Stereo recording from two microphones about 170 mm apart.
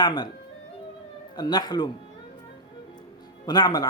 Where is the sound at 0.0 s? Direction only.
25° left (ahead or behind).